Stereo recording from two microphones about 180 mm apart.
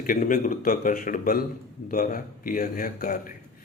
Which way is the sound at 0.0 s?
50° left (ahead or behind).